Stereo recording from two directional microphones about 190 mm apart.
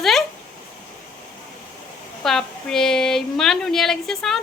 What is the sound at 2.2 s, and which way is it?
A woman's voice, centre (ahead or behind).